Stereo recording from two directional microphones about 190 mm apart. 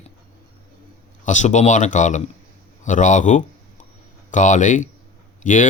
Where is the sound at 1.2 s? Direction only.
40° left (ahead or behind).